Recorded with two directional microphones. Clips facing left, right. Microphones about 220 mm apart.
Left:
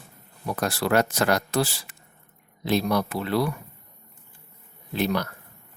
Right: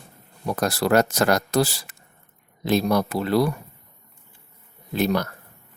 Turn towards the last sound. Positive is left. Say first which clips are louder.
# right 3 dB
turn(degrees=-45)  # may be behind; listen again after turning